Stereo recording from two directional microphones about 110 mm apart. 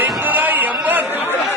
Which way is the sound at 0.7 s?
10° right (ahead or behind).